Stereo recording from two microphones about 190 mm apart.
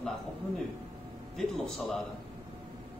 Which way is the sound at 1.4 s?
Centre (ahead or behind).